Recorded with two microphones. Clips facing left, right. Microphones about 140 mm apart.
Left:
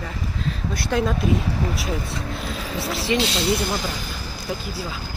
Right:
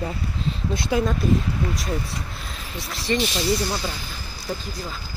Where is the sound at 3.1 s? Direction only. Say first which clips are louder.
Left 1 dB; 90° left.